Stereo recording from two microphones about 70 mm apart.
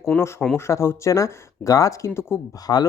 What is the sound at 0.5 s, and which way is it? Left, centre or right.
Speech, left.